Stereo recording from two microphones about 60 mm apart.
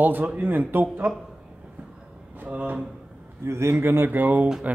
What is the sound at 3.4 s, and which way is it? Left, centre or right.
Speech, right.